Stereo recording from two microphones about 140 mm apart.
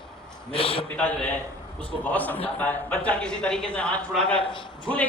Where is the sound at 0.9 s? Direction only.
10° left (ahead or behind).